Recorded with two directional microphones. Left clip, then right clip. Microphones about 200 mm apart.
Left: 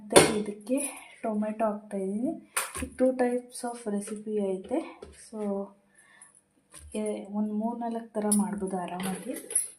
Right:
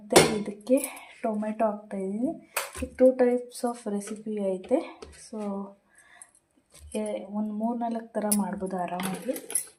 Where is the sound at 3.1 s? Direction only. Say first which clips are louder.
Right 4 dB; 10° right (ahead or behind).